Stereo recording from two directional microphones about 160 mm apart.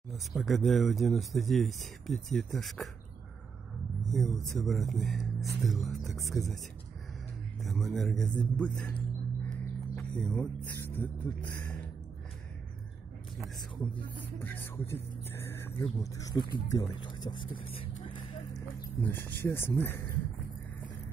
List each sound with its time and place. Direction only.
0.1 s speech: centre (ahead or behind)
4.1 s speech: centre (ahead or behind)
7.6 s a man's voice: centre (ahead or behind)
10.8 s music: 10° left (ahead or behind)
13.7 s music: 10° left (ahead or behind)
16.6 s speech: 20° left (ahead or behind)
18.9 s music: 10° left (ahead or behind)